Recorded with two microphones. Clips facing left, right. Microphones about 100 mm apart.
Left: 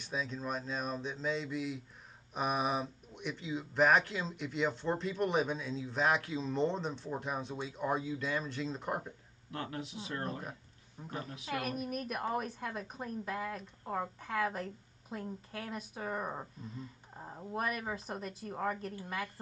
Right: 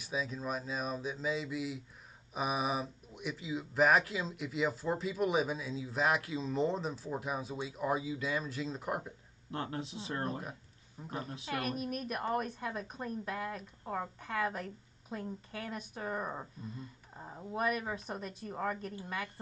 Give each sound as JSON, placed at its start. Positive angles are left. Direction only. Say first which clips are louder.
{"t": 0.0, "sound": "a woman's voice", "louder": "right 1 dB", "side_deg": -5}
{"t": 9.5, "sound": "speech", "louder": "right 2 dB", "side_deg": -30}
{"t": 11.0, "sound": "a woman's voice", "louder": "right 1 dB", "side_deg": 0}